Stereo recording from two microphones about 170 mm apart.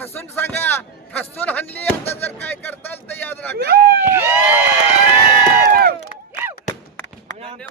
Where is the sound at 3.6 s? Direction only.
65° right (ahead or behind).